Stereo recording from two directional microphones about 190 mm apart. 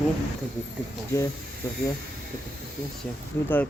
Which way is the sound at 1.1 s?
15° left (ahead or behind).